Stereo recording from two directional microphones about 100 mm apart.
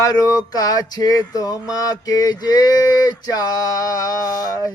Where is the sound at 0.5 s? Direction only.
40° left (ahead or behind).